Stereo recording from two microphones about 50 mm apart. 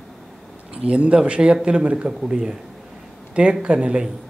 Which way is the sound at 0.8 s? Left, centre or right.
Right.